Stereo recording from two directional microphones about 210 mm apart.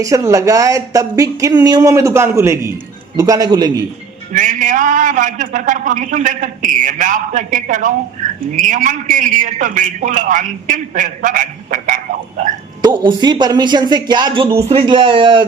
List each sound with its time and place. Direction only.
0.0 s speech: 15° right (ahead or behind)
4.3 s a man's voice: 35° right (ahead or behind)
12.8 s speech: 20° right (ahead or behind)